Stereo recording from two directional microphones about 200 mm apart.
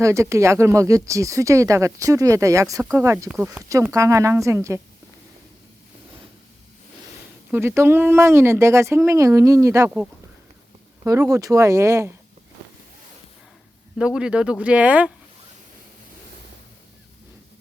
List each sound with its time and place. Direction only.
0.0 s speech: 15° right (ahead or behind)
7.5 s speech: 10° right (ahead or behind)
14.0 s speech: 5° right (ahead or behind)